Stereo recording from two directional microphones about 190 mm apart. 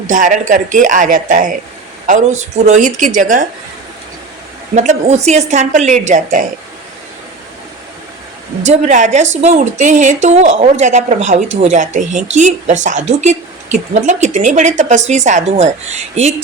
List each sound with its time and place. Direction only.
0.1 s a woman's voice: 40° right (ahead or behind)
4.7 s a woman's voice: 40° right (ahead or behind)
8.6 s a woman's voice: 40° right (ahead or behind)